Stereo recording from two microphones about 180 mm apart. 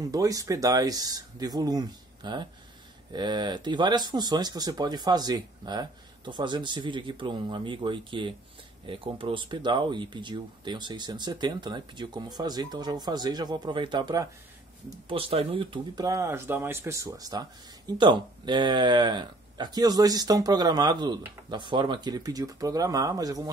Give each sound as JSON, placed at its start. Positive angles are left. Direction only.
{"t": 0.0, "sound": "speech", "side_deg": -20}